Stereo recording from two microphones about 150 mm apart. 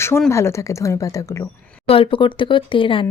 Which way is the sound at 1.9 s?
35° left (ahead or behind).